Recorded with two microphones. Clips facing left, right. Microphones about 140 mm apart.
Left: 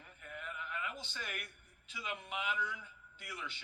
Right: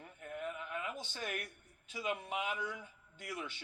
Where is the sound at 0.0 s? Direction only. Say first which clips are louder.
Right 6 dB; 40° right (ahead or behind).